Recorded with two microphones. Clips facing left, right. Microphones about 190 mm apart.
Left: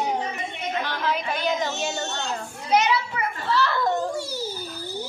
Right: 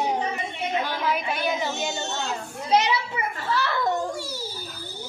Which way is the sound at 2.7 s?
25° right (ahead or behind).